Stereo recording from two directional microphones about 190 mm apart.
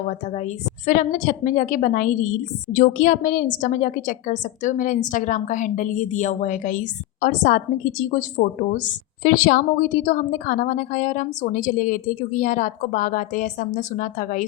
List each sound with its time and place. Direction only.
0.1 s a woman's voice: 35° left (ahead or behind)